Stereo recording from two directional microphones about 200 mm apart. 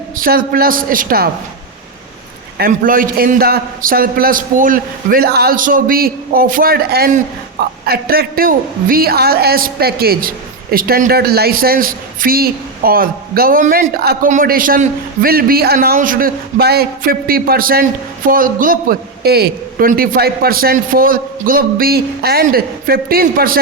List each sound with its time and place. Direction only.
0.2 s a woman's voice: 45° right (ahead or behind)
2.6 s a woman's voice: 45° right (ahead or behind)